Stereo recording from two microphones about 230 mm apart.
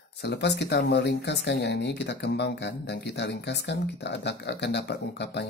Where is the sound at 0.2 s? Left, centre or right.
Left.